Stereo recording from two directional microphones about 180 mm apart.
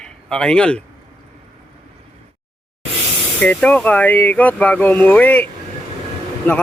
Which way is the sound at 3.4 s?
5° left (ahead or behind).